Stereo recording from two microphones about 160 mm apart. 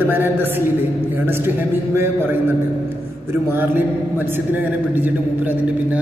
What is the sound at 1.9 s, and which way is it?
Speech, 15° right (ahead or behind).